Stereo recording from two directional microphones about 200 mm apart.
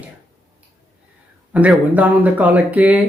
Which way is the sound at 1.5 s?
5° right (ahead or behind).